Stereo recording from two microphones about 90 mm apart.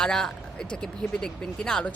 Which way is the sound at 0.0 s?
5° left (ahead or behind).